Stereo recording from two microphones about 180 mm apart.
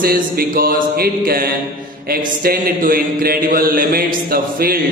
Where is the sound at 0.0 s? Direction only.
55° right (ahead or behind).